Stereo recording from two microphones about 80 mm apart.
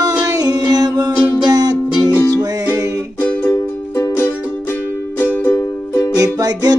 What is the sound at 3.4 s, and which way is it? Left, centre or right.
Music, left.